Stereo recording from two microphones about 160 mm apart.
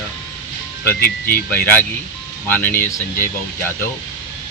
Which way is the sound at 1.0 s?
65° left (ahead or behind).